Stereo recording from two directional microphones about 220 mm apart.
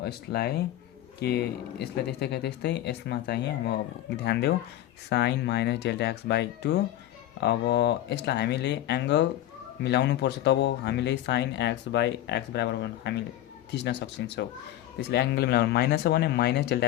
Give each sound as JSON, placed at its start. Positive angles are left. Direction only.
{"t": 0.0, "sound": "speech", "side_deg": 45}